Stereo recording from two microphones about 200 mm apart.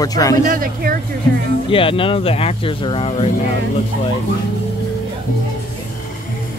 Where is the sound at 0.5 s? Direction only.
45° right (ahead or behind).